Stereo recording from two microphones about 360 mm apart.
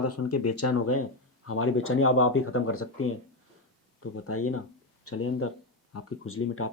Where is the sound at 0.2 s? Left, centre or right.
Left.